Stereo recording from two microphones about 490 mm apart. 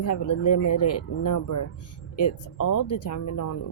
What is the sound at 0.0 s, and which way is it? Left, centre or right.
Speech, left.